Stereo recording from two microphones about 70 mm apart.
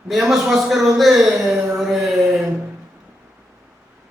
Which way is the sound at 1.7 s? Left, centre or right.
Centre.